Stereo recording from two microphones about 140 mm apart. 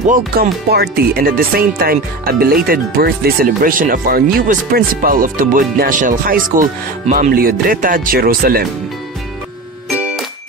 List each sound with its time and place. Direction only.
0.0 s speech: 80° right